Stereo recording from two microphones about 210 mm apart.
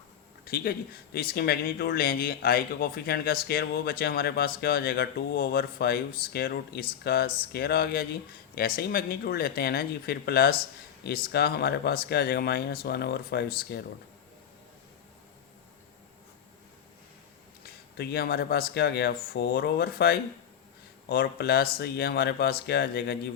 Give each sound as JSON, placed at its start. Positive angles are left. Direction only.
{"t": 0.4, "sound": "speech", "side_deg": 45}
{"t": 17.6, "sound": "speech", "side_deg": 50}